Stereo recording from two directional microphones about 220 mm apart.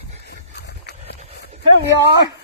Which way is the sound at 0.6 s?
50° left (ahead or behind).